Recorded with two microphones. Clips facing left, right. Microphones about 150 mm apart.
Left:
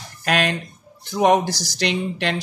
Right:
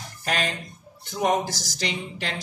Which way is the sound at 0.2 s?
75° left (ahead or behind).